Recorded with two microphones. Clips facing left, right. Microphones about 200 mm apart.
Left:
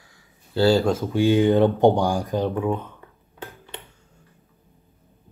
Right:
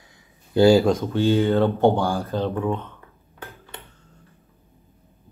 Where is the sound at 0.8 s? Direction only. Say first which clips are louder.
Even; 5° left (ahead or behind).